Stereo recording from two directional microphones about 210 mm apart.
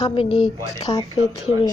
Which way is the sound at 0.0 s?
25° left (ahead or behind).